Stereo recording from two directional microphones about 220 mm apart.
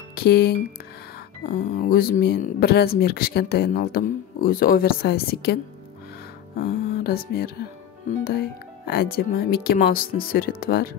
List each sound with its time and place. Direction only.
0.1 s speech: 45° left (ahead or behind)
1.9 s speech: 40° left (ahead or behind)
6.6 s speech: 45° left (ahead or behind)